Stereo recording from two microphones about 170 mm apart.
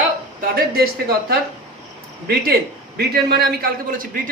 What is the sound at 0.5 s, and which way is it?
A man's voice, 65° right (ahead or behind).